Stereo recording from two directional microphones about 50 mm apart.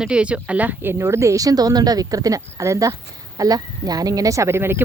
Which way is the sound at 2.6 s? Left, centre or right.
Right.